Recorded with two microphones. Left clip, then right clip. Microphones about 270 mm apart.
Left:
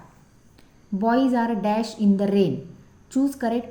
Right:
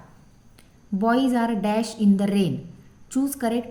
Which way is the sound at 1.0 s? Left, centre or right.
Right.